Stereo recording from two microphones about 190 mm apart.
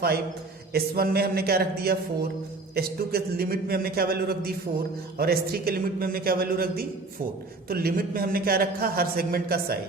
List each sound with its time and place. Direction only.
0.7 s a man's voice: 55° right (ahead or behind)